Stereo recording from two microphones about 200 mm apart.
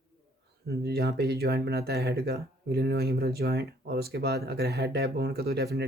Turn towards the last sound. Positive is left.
turn(degrees=-55)  # may be behind; listen again after turning